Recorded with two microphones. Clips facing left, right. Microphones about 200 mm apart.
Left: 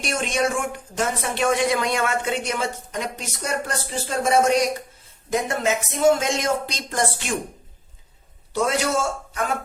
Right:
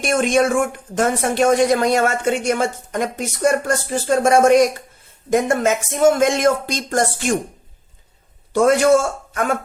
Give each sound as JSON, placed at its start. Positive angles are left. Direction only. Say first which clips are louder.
{"t": 0.0, "sound": "speech", "louder": "right 7 dB", "side_deg": -50}
{"t": 8.5, "sound": "speech", "louder": "right 9 dB", "side_deg": -50}